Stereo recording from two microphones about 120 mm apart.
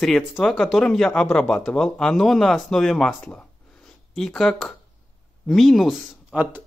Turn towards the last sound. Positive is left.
turn(degrees=-15)  # may be behind; listen again after turning